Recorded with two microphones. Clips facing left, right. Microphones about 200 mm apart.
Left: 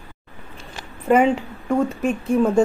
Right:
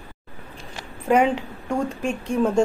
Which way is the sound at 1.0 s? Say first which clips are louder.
Left 2 dB; centre (ahead or behind).